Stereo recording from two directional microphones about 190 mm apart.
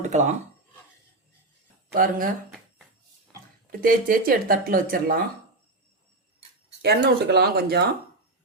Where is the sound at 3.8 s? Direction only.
50° right (ahead or behind).